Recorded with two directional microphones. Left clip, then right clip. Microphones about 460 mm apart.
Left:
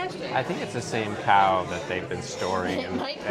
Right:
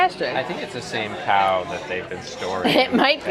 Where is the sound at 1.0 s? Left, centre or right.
Centre.